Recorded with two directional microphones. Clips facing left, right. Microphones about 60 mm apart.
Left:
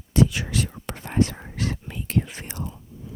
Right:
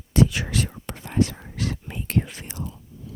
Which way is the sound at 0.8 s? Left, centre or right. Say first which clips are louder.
Left 2 dB; left.